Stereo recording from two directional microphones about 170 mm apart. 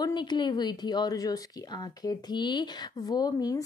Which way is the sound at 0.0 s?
25° left (ahead or behind).